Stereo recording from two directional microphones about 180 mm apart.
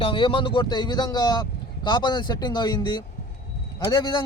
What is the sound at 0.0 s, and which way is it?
A man's voice, 30° left (ahead or behind).